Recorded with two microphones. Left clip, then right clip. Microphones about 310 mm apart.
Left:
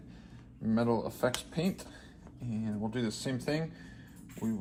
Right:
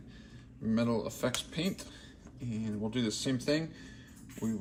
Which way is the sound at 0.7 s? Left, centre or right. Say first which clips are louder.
Left 2 dB; centre.